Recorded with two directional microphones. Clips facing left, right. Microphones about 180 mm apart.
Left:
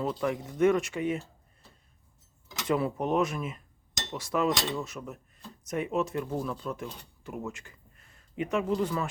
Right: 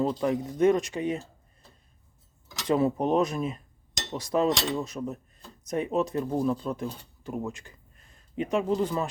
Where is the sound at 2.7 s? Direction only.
30° right (ahead or behind).